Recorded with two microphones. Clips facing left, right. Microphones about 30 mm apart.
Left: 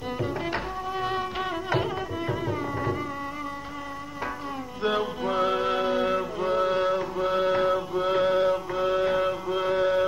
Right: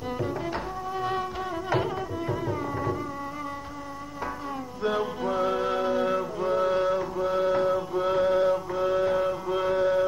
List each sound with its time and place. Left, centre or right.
1.7 s music: centre
4.8 s music: left